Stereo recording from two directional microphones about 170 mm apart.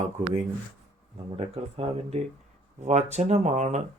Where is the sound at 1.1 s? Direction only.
35° right (ahead or behind).